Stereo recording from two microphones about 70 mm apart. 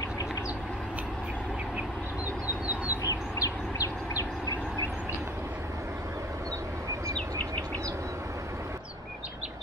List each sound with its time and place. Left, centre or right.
2.9 s bird: left
7.2 s bird: left